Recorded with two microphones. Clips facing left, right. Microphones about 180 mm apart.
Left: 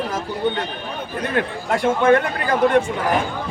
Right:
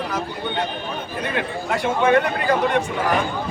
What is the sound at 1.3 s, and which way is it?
Speech, 50° left (ahead or behind).